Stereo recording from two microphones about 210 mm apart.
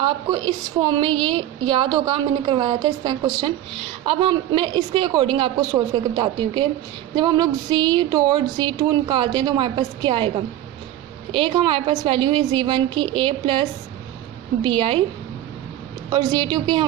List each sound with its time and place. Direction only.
0.0 s a woman's voice: 20° right (ahead or behind)
11.3 s a woman's voice: 25° right (ahead or behind)
16.1 s a woman's voice: 20° right (ahead or behind)